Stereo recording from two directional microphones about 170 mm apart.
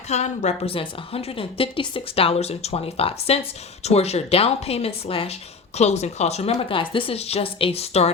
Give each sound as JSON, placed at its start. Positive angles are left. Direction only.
{"t": 0.1, "sound": "a woman's voice", "side_deg": 40}